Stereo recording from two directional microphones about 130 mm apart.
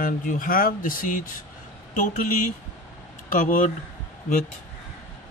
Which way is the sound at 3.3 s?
90° left.